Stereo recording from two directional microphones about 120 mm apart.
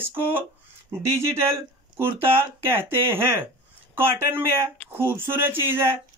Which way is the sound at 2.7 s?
20° right (ahead or behind).